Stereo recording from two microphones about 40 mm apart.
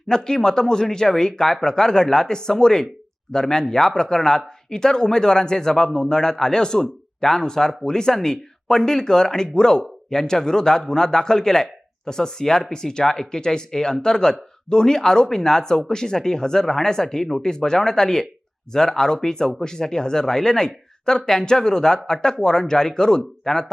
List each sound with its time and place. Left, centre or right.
0.3 s speech: centre